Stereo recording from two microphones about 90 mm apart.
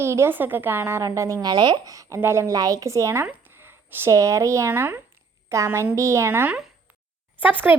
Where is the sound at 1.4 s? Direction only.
50° right (ahead or behind); by 3.2 s 35° right (ahead or behind).